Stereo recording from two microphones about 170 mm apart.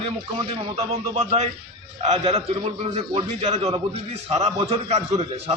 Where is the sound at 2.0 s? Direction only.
35° right (ahead or behind).